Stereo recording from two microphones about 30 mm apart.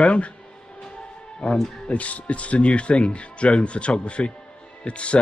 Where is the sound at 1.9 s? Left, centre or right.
Left.